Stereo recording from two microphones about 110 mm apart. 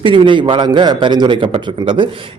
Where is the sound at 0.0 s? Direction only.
50° right (ahead or behind).